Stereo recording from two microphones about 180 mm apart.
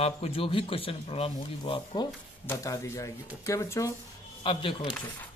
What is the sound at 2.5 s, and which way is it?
Speech, 15° left (ahead or behind).